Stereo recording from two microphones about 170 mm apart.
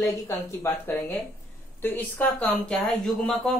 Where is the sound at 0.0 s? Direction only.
20° left (ahead or behind).